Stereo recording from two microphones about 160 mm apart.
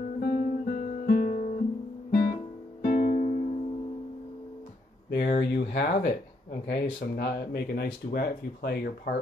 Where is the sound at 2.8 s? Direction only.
60° left (ahead or behind).